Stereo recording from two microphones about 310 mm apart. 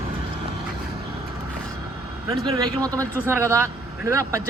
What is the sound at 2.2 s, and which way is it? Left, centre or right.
Speech, centre.